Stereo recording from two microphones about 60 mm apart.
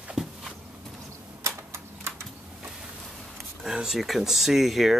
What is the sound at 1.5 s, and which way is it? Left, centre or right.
Typewriter, right.